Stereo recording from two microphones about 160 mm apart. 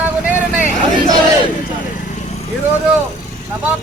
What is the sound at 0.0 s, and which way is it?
Vehicle, 10° right (ahead or behind).